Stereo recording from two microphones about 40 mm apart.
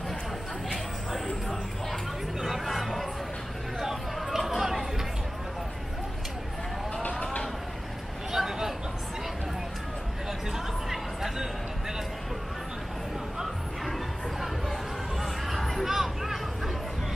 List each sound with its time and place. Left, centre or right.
2.4 s chatter: centre
7.0 s vehicle: left
8.3 s a sound: centre
10.5 s music: centre
13.8 s music: centre